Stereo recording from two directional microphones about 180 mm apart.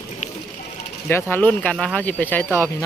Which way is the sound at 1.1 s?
10° left (ahead or behind).